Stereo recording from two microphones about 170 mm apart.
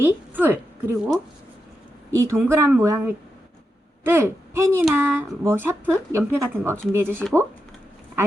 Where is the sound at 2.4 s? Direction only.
15° right (ahead or behind).